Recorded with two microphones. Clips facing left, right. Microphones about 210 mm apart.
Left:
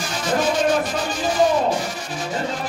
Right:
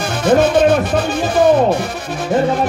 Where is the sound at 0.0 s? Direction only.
60° right (ahead or behind).